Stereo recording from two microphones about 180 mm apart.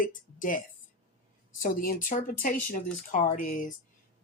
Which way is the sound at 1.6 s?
50° left (ahead or behind).